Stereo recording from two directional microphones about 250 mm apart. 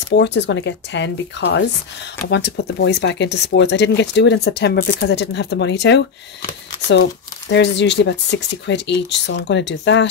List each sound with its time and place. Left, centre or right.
0.1 s speech: left